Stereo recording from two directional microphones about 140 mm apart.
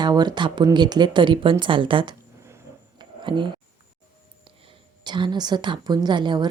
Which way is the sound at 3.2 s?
35° right (ahead or behind).